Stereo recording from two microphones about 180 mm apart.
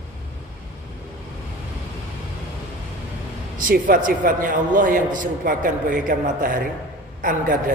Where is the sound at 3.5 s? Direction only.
50° right (ahead or behind).